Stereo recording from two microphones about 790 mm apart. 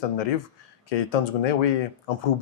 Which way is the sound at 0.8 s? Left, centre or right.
Left.